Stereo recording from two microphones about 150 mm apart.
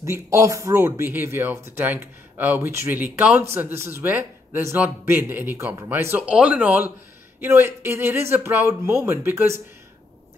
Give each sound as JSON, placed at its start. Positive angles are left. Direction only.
{"t": 0.0, "sound": "speech", "side_deg": -20}